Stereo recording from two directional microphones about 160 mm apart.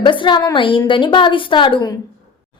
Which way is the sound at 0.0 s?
30° left (ahead or behind).